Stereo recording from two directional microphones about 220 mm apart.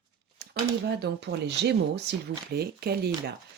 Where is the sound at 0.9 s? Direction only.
50° right (ahead or behind).